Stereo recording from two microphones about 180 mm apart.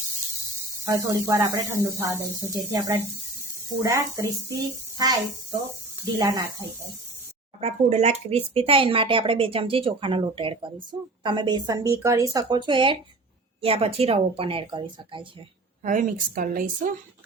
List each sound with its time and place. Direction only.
0.9 s speech: 20° right (ahead or behind)
7.6 s speech: 35° right (ahead or behind)
15.8 s a woman's voice: 45° right (ahead or behind)